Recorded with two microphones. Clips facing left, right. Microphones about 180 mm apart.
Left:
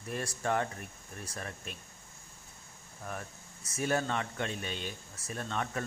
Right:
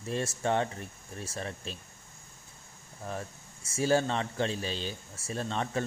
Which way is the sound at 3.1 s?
30° right (ahead or behind).